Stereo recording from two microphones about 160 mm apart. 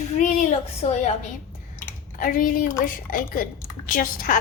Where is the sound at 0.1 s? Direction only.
50° left (ahead or behind).